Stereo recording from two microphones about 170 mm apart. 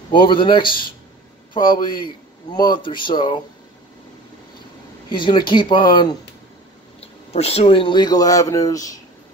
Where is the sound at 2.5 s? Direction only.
25° left (ahead or behind).